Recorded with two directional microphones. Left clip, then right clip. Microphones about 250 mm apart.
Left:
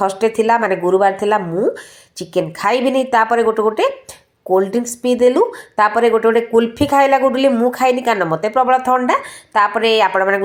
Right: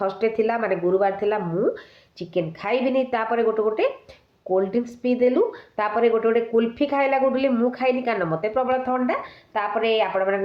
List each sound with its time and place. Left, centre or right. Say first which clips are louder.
0.0 s speech: left 7 dB; left